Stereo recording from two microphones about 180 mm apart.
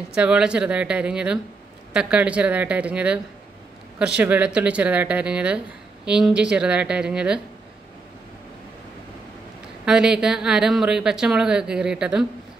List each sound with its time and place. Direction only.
0.1 s speech: 5° right (ahead or behind)
9.8 s speech: 5° right (ahead or behind)